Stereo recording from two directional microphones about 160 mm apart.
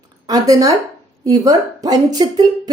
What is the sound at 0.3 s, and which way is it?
Speech, 20° right (ahead or behind).